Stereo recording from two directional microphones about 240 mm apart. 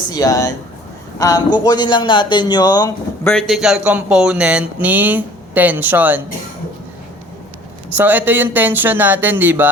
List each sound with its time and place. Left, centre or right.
0.1 s a man's voice: centre
3.3 s speech: centre
7.9 s speech: centre